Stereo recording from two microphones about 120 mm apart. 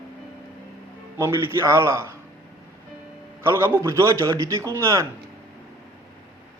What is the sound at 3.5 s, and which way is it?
A man's voice, 20° right (ahead or behind).